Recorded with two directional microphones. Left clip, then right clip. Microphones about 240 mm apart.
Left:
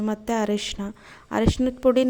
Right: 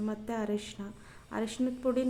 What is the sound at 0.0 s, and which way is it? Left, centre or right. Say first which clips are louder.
A woman's voice: left 10 dB; left.